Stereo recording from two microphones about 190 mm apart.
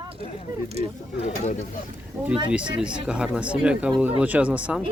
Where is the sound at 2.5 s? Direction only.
5° right (ahead or behind).